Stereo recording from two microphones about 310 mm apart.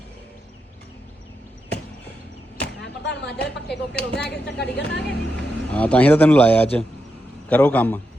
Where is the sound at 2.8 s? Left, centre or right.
Left.